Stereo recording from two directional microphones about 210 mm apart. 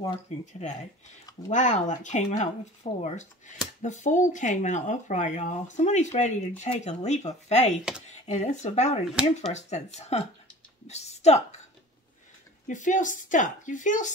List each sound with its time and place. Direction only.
0.0 s speech: 35° left (ahead or behind)
12.6 s speech: 35° left (ahead or behind)